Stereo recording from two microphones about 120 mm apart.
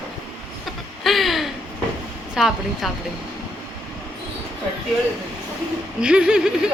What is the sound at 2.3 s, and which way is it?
Speech, 5° right (ahead or behind).